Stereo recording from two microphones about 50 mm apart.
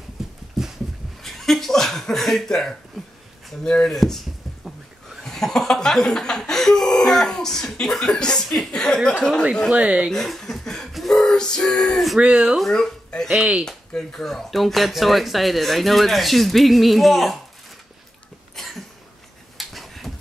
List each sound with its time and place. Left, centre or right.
0.2 s a sound: centre
3.6 s speech: centre
3.9 s a sound: centre
5.2 s speech: centre
9.7 s speech: right
10.1 s speech: centre
10.9 s gasp: centre
11.1 s music: centre
11.8 s speech: centre
12.2 s speech: right
12.5 s speech: centre
18.6 s cough: centre
19.5 s a sound: centre